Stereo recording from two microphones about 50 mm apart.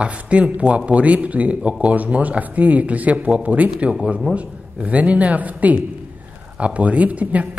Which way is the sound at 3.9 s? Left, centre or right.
Centre.